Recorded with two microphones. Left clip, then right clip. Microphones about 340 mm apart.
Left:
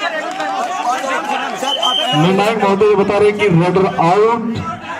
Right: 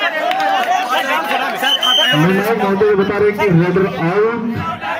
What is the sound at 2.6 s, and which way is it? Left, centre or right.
Speech, centre.